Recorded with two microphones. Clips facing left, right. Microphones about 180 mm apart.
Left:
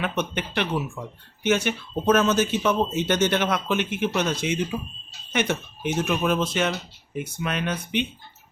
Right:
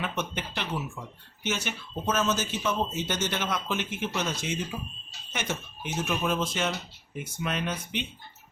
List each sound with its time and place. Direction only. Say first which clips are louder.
0.0 s speech: left 5 dB; 65° left (ahead or behind)